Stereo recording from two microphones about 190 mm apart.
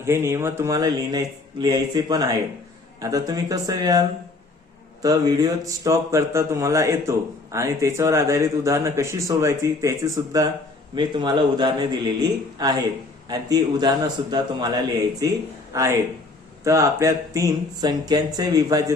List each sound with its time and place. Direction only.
0.0 s speech: 15° right (ahead or behind)
5.0 s speech: 20° right (ahead or behind)